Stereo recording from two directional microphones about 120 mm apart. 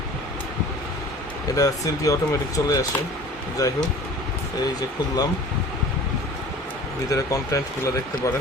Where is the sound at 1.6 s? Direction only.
30° left (ahead or behind).